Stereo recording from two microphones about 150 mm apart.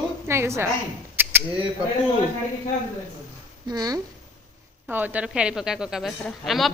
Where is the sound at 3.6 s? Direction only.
25° right (ahead or behind).